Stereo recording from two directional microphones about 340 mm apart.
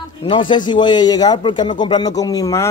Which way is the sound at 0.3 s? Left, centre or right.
Centre.